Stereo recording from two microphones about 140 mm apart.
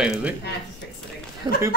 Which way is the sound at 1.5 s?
30° right (ahead or behind).